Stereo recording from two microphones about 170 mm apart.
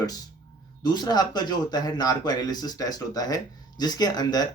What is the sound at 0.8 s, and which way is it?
Speech, 25° left (ahead or behind).